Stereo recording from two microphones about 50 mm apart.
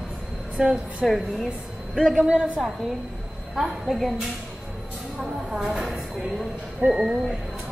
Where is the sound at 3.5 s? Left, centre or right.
Centre.